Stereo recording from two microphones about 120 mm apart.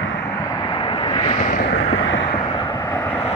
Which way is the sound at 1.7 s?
55° left (ahead or behind).